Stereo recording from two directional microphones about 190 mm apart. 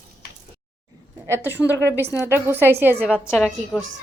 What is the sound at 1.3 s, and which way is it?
A woman's voice, 10° right (ahead or behind).